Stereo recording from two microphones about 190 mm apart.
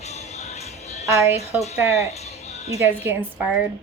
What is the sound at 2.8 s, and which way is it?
Speech, 10° right (ahead or behind).